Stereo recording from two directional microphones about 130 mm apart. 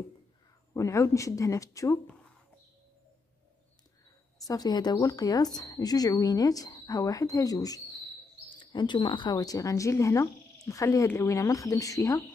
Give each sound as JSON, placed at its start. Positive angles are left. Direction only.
{"t": 0.7, "sound": "speech", "side_deg": 25}
{"t": 4.5, "sound": "speech", "side_deg": 30}